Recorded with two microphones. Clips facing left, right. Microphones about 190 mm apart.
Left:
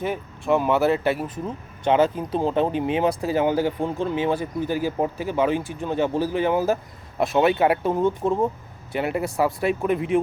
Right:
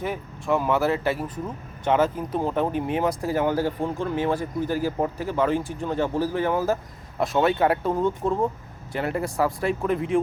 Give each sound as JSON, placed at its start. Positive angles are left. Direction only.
{"t": 0.0, "sound": "speech", "side_deg": 20}